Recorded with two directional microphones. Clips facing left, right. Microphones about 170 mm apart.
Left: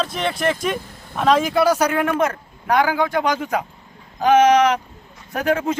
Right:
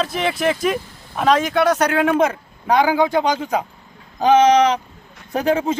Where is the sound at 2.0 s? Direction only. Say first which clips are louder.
Right 3 dB; 20° right (ahead or behind).